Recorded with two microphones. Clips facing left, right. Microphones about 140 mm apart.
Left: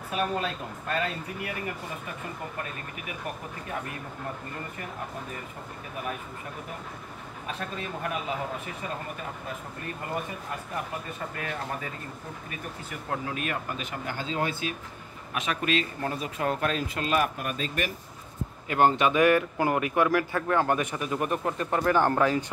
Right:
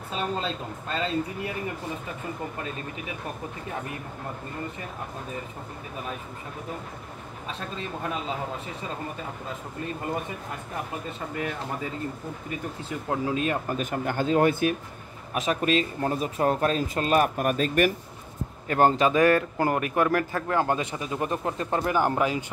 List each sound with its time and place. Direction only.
0.1 s speech: 25° right (ahead or behind)
11.3 s speech: 20° right (ahead or behind)
13.1 s speech: 25° right (ahead or behind)
13.7 s speech: 50° right (ahead or behind)
15.3 s speech: 40° right (ahead or behind)
18.7 s speech: 40° right (ahead or behind)
19.6 s speech: 15° left (ahead or behind)
20.0 s speech: 40° right (ahead or behind); by 22.4 s 15° right (ahead or behind)